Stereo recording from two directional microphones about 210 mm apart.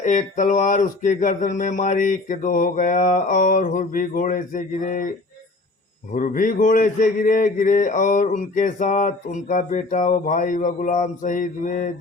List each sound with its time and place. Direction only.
0.0 s speech: 35° left (ahead or behind)
6.1 s speech: 40° left (ahead or behind)